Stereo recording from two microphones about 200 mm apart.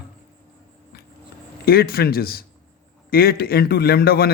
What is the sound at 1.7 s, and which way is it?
A man's voice, 50° left (ahead or behind).